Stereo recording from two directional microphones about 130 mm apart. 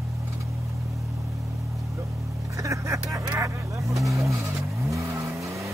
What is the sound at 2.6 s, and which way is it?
Vehicle, 25° right (ahead or behind).